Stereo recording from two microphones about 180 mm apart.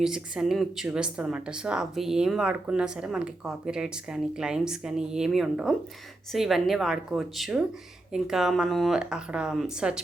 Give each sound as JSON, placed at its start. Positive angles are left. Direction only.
{"t": 0.0, "sound": "a woman's voice", "side_deg": -5}